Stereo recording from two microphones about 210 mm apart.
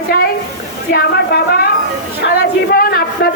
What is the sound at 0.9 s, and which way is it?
Speech, 50° left (ahead or behind).